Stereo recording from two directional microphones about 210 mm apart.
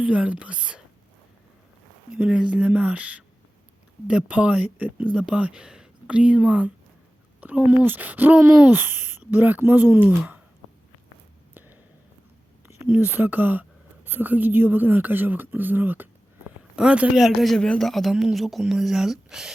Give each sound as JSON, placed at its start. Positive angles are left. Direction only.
{"t": 0.0, "sound": "a man's voice", "side_deg": -5}
{"t": 2.1, "sound": "a man's voice", "side_deg": -5}
{"t": 11.5, "sound": "a sound", "side_deg": -10}
{"t": 13.0, "sound": "a woman's voice", "side_deg": -10}